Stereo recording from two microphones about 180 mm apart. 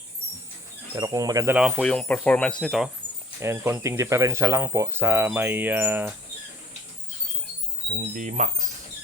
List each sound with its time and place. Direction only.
0.9 s speech: 20° right (ahead or behind)
1.5 s speech: 5° right (ahead or behind)
1.8 s speech: 5° left (ahead or behind)
3.4 s speech: 15° right (ahead or behind)
7.9 s speech: 45° right (ahead or behind)